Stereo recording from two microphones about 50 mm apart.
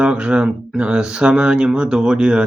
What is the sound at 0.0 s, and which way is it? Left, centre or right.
Speech, right.